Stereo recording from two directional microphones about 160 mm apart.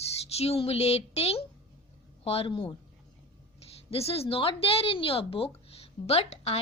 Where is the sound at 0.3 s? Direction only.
40° left (ahead or behind).